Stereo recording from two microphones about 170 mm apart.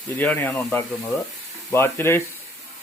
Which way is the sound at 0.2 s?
10° left (ahead or behind).